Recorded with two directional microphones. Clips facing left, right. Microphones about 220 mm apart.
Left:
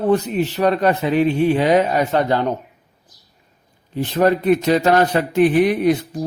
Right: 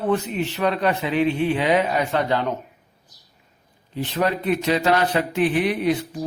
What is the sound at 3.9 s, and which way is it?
A man's voice, 50° left (ahead or behind).